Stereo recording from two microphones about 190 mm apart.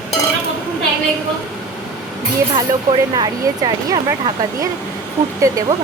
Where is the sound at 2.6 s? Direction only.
20° right (ahead or behind).